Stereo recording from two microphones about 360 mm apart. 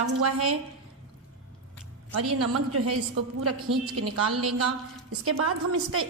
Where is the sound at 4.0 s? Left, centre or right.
Right.